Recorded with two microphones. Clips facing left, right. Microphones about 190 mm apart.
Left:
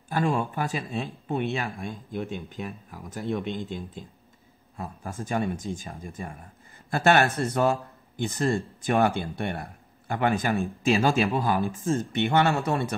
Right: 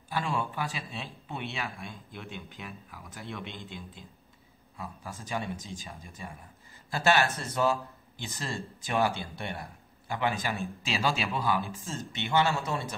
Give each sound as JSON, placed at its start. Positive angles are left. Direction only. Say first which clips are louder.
{"t": 0.1, "sound": "speech", "louder": "left 6 dB", "side_deg": 50}